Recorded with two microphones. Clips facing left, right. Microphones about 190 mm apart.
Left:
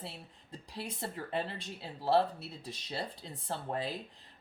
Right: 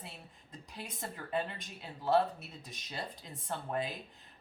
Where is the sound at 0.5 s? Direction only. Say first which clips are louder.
Left 4 dB; 30° left (ahead or behind).